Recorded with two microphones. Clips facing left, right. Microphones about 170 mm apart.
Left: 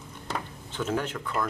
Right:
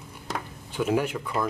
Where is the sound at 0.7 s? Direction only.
10° right (ahead or behind).